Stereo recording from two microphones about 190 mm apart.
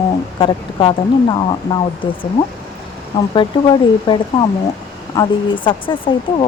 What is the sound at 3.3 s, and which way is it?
Speech, 25° left (ahead or behind).